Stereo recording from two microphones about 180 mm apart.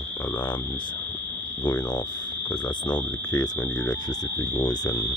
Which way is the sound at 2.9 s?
20° left (ahead or behind).